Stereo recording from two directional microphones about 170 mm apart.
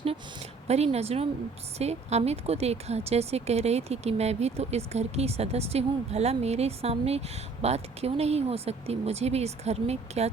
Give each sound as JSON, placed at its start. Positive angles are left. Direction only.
{"t": 0.7, "sound": "speech", "side_deg": -40}